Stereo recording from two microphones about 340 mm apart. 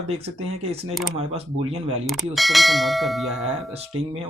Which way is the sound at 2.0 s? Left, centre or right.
Centre.